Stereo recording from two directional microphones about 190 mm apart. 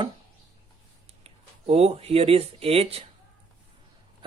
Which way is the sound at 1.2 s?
30° right (ahead or behind).